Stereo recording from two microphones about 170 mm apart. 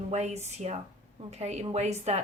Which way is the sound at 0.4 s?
40° right (ahead or behind).